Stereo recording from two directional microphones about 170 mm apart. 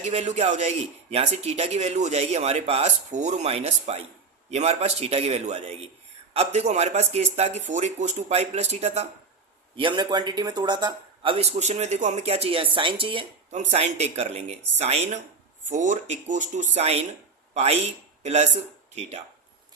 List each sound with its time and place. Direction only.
0.0 s a man's voice: 40° right (ahead or behind)
9.7 s a man's voice: 30° right (ahead or behind)
13.6 s a man's voice: 40° right (ahead or behind)